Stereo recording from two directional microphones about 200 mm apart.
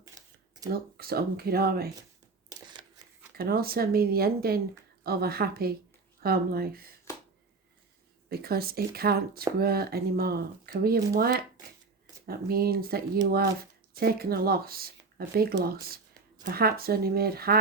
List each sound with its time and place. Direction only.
0.7 s speech: 50° right (ahead or behind)
2.5 s a sound: 20° right (ahead or behind)
3.3 s speech: 50° right (ahead or behind)
8.3 s speech: 50° right (ahead or behind)